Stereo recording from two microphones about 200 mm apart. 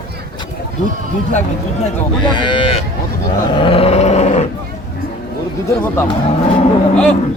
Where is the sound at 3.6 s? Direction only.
25° left (ahead or behind).